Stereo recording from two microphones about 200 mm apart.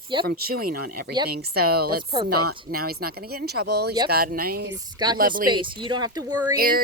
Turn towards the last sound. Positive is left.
turn(degrees=-20)  # may be behind; listen again after turning